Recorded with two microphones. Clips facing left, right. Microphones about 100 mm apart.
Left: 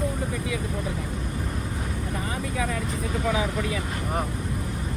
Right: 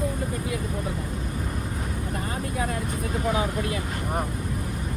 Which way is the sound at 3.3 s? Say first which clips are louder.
Even; 25° right (ahead or behind).